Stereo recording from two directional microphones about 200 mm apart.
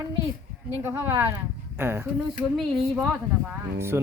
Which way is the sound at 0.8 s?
10° right (ahead or behind).